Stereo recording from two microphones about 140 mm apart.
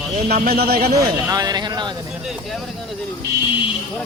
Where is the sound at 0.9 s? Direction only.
25° right (ahead or behind).